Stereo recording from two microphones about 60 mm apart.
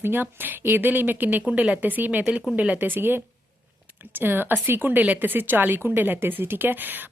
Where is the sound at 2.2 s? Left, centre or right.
Centre; by 6.8 s right.